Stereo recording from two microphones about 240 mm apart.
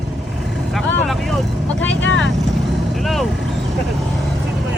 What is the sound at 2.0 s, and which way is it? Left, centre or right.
Vehicle, left.